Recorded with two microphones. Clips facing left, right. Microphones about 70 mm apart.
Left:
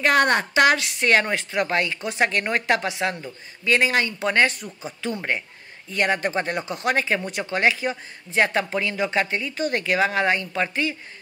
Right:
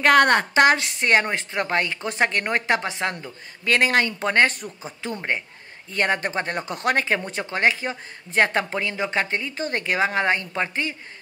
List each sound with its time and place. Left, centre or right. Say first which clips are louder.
0.0 s a woman's voice: right 3 dB; right
5.0 s speech: left 2 dB; right
5.9 s a woman's voice: left 1 dB; right
7.2 s a woman's voice: even; right